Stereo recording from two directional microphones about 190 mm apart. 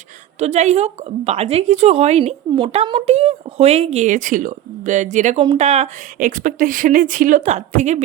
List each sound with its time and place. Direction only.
0.3 s a woman's voice: 35° right (ahead or behind)